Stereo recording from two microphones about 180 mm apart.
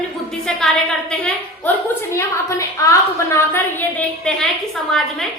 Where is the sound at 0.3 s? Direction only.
Centre (ahead or behind).